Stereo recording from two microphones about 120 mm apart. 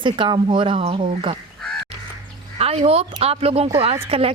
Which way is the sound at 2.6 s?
55° right (ahead or behind).